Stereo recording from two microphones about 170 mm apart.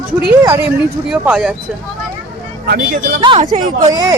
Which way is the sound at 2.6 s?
70° right (ahead or behind).